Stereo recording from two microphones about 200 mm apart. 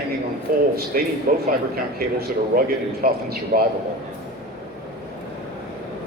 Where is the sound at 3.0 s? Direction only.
45° right (ahead or behind).